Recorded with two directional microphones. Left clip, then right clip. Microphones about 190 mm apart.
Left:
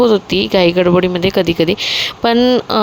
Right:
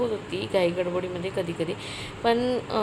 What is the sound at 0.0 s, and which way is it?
Speech, 50° left (ahead or behind).